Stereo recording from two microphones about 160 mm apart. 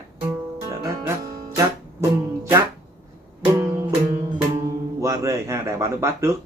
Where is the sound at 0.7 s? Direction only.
20° right (ahead or behind).